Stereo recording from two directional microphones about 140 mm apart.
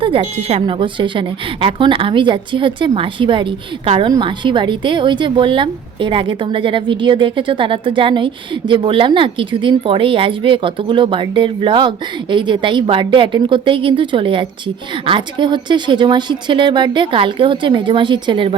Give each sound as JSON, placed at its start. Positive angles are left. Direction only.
{"t": 0.0, "sound": "speech", "side_deg": -40}